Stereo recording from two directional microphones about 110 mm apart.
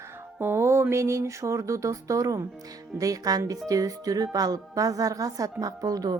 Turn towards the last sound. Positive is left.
turn(degrees=-35)  # may be behind; listen again after turning